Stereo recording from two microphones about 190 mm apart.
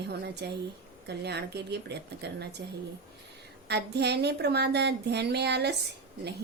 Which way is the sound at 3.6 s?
60° right (ahead or behind).